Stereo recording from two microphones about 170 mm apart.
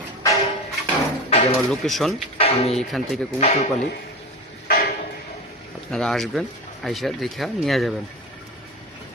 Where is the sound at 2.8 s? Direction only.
Centre (ahead or behind).